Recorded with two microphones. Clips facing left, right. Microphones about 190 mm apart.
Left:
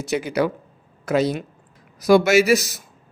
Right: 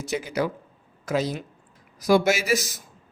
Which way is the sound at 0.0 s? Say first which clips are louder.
Left 5 dB; 70° left (ahead or behind).